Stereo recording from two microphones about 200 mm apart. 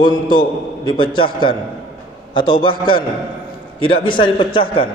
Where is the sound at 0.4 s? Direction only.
25° left (ahead or behind).